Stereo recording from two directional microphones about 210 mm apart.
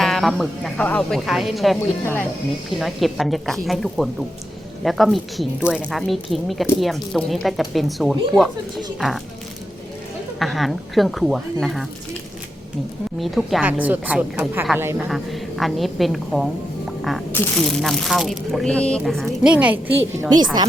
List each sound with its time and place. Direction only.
0.0 s speech: centre (ahead or behind)
10.4 s speech: centre (ahead or behind)
13.1 s a woman's voice: centre (ahead or behind)
20.3 s a woman's voice: 20° right (ahead or behind)